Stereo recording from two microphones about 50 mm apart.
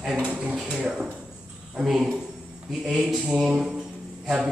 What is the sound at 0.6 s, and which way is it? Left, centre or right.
A man's voice, right.